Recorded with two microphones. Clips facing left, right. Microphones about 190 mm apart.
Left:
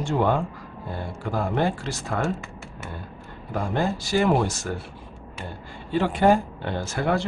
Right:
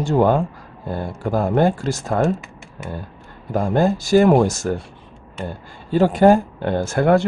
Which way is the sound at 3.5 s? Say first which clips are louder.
Right 7 dB; 45° right (ahead or behind).